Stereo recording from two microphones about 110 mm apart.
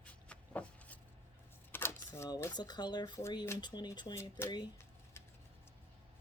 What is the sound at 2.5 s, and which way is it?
Speech, 40° left (ahead or behind).